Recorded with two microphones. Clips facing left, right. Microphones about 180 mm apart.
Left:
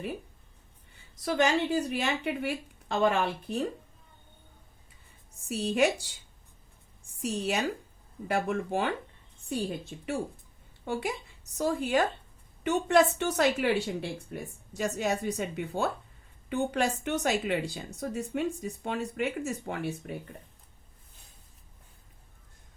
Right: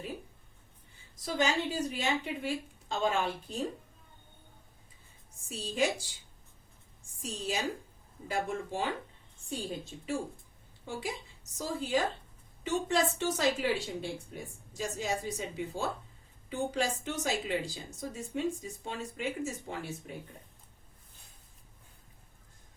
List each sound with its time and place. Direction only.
1.2 s a woman's voice: 65° left (ahead or behind)
5.5 s a woman's voice: 65° left (ahead or behind)
7.2 s a woman's voice: 65° left (ahead or behind)